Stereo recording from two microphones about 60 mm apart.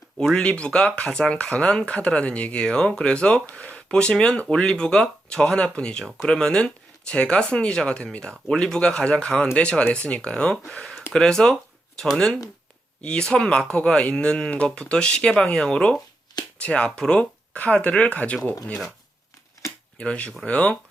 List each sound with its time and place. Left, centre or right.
0.3 s speech: centre
20.0 s speech: left